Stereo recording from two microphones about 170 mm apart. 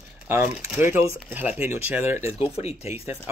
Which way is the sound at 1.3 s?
10° right (ahead or behind).